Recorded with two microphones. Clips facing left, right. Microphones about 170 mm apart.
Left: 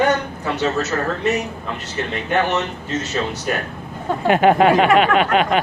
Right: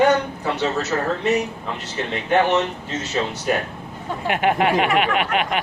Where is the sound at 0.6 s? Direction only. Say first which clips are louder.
Left 2 dB; 45° left (ahead or behind).